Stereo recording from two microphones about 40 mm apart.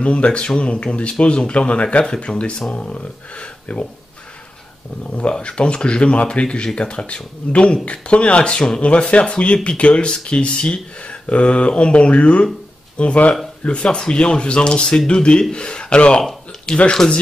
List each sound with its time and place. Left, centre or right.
0.0 s speech: left
5.4 s speech: left
13.8 s speech: left
16.2 s a sound: centre
16.9 s speech: centre